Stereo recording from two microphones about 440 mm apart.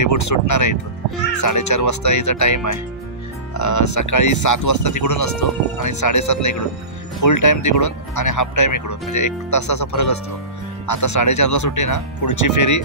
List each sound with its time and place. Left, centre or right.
0.0 s speech: left